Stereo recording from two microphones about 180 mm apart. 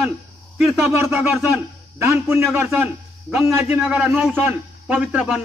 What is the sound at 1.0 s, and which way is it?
A man's voice, 10° right (ahead or behind).